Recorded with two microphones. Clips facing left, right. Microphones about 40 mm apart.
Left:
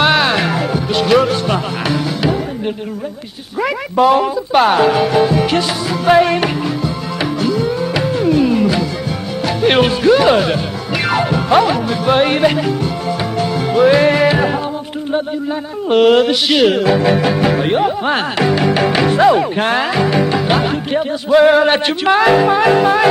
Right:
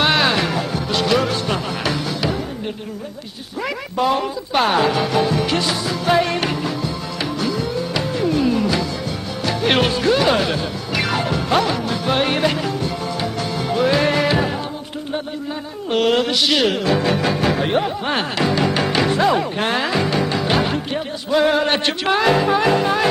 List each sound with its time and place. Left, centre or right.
0.0 s music: centre
3.6 s speech: centre
7.4 s music: centre
15.9 s speech: centre